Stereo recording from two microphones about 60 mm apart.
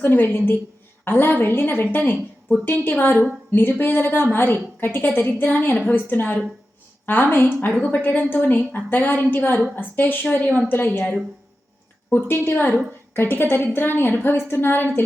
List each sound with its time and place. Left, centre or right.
0.0 s a woman's voice: left
8.0 s a woman's voice: left
12.5 s a woman's voice: left